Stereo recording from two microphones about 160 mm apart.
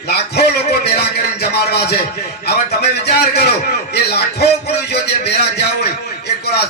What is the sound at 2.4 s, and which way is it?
A man's voice, 90° left.